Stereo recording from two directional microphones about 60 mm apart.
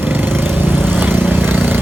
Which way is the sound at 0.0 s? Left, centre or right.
Right.